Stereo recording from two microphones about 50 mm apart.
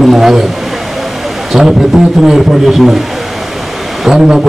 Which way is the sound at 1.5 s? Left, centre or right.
Centre.